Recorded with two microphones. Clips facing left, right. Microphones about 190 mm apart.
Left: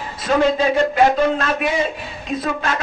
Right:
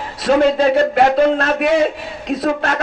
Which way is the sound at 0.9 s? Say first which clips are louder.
Right 3 dB; 60° right (ahead or behind).